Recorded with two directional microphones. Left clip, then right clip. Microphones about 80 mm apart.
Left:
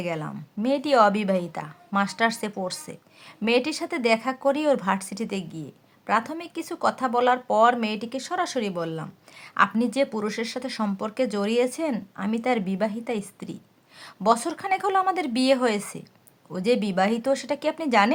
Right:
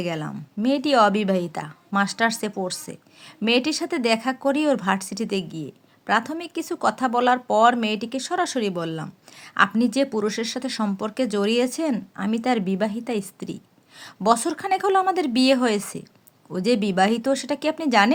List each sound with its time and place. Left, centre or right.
0.0 s speech: right